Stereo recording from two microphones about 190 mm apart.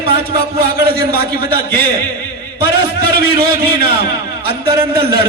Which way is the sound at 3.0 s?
55° right (ahead or behind).